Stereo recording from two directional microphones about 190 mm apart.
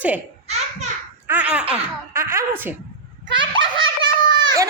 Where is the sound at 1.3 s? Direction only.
5° right (ahead or behind).